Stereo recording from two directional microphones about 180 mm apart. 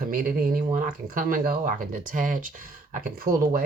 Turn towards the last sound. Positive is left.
turn(degrees=-55)  # may be behind; listen again after turning